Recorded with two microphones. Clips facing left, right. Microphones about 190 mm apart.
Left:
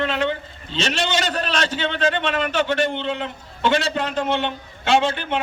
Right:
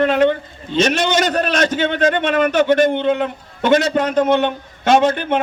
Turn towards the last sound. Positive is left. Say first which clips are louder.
# right 5 dB
turn(degrees=-50)  # may be behind; listen again after turning